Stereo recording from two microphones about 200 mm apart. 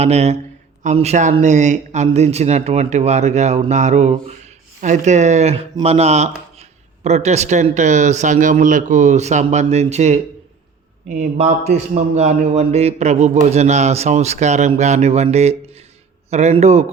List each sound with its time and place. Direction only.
0.0 s speech: 30° right (ahead or behind)